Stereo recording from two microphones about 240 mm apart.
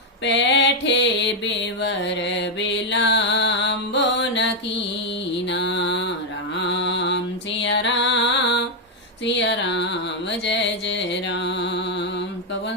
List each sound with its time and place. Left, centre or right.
0.3 s mantra: left
5.5 s music: left
9.2 s carnatic music: left